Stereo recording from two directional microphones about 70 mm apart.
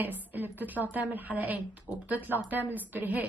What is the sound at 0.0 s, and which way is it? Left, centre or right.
A woman's voice, right.